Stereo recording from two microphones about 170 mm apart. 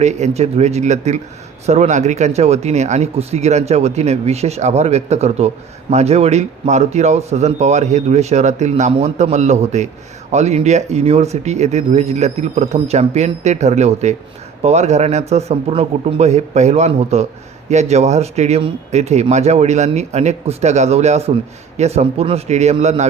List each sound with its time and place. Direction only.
0.0 s speech: 40° right (ahead or behind)